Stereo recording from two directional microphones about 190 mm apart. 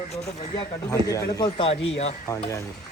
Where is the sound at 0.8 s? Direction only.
20° left (ahead or behind).